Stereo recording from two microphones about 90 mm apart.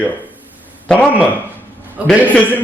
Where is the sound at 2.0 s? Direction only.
15° right (ahead or behind).